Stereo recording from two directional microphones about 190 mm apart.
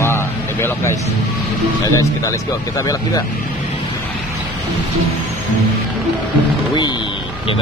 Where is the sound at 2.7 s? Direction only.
20° left (ahead or behind).